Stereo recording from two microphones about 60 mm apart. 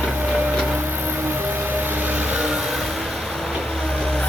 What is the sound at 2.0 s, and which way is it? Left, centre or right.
Vehicle, right.